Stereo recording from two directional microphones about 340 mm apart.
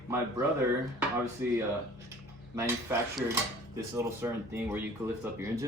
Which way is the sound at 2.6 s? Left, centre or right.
Centre.